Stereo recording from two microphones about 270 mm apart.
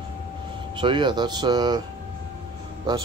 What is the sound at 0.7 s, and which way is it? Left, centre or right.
Speech, centre.